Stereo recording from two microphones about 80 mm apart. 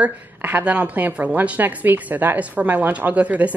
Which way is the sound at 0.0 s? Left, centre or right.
Right.